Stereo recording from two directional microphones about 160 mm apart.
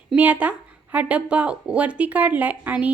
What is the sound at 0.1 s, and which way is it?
A woman's voice, 10° right (ahead or behind).